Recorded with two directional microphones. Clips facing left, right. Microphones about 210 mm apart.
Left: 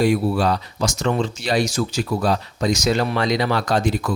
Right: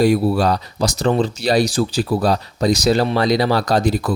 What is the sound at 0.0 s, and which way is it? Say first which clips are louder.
Speech: right 3 dB; 35° right (ahead or behind).